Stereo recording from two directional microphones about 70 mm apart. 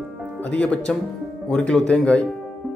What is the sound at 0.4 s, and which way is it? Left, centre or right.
Speech, centre.